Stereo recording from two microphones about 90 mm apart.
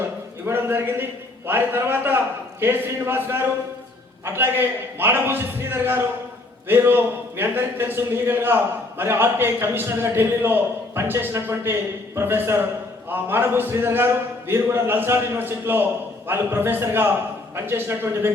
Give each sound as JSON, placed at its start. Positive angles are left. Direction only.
{"t": 0.4, "sound": "a man's voice", "side_deg": -25}